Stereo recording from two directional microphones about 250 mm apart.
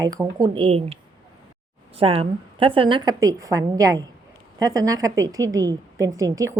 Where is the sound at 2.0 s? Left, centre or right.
Right.